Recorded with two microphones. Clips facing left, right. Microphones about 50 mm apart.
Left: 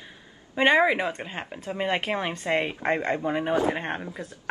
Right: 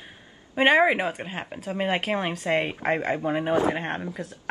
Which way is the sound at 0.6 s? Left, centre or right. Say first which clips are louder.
Right 1 dB; right.